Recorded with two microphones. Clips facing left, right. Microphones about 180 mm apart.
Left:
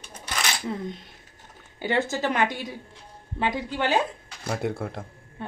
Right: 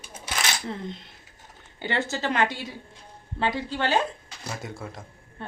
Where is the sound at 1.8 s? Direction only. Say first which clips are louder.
Left 3 dB; 15° left (ahead or behind).